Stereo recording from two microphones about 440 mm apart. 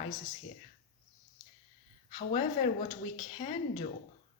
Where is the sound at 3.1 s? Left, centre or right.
Centre.